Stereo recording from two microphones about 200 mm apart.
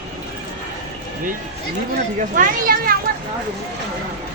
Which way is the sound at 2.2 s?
45° right (ahead or behind).